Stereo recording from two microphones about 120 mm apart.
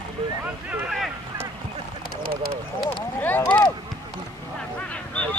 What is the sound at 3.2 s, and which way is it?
Speech, 15° left (ahead or behind).